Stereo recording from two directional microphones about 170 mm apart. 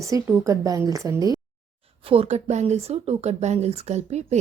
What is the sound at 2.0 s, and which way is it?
Speech, 35° right (ahead or behind).